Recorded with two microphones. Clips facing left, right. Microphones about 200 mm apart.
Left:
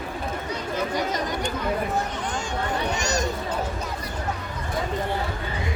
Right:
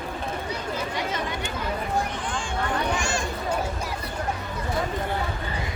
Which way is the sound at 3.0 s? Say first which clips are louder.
Left 2 dB; 40° left (ahead or behind).